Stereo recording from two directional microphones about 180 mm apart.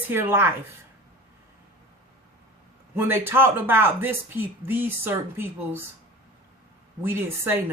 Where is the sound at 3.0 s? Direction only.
15° right (ahead or behind).